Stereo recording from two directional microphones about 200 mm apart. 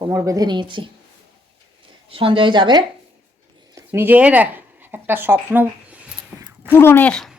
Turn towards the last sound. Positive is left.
turn(degrees=5)  # may be behind; listen again after turning